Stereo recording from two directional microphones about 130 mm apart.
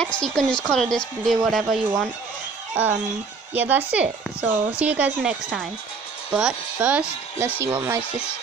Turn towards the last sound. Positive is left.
turn(degrees=-20)  # may be behind; listen again after turning